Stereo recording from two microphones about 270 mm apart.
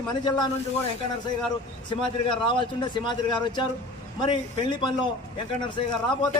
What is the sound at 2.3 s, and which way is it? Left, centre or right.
Speech, centre.